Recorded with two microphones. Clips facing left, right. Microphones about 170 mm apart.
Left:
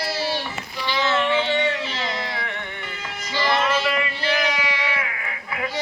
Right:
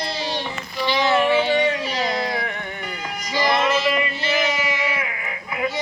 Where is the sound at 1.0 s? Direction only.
15° right (ahead or behind).